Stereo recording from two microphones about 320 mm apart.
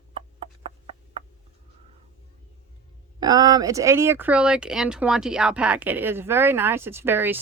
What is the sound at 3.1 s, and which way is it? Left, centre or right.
Speech, centre.